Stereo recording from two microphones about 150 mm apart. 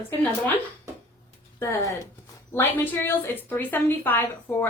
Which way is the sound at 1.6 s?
20° left (ahead or behind).